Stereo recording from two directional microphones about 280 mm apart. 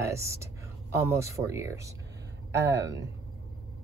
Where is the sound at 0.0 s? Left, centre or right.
Centre.